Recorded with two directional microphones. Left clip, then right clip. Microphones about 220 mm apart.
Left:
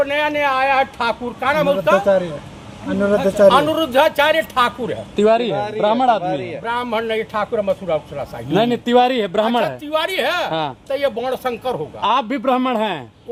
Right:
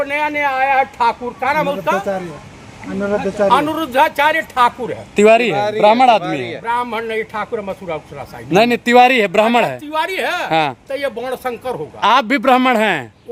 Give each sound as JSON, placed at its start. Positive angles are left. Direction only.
{"t": 0.0, "sound": "speech", "side_deg": 0}
{"t": 3.0, "sound": "speech", "side_deg": 45}
{"t": 3.5, "sound": "speech", "side_deg": 0}
{"t": 5.1, "sound": "a man's voice", "side_deg": -40}
{"t": 6.7, "sound": "speech", "side_deg": -5}
{"t": 8.5, "sound": "a man's voice", "side_deg": -40}
{"t": 9.9, "sound": "speech", "side_deg": 0}
{"t": 10.5, "sound": "a man's voice", "side_deg": -40}
{"t": 10.8, "sound": "speech", "side_deg": -5}
{"t": 11.9, "sound": "a man's voice", "side_deg": -40}